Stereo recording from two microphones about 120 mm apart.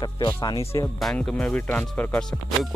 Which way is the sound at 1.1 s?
10° left (ahead or behind).